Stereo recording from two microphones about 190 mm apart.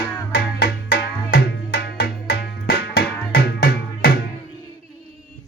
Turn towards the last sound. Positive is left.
turn(degrees=55)  # may be behind; listen again after turning